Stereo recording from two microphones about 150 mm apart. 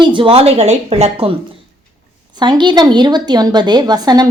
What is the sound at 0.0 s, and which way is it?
A woman's voice, 35° right (ahead or behind).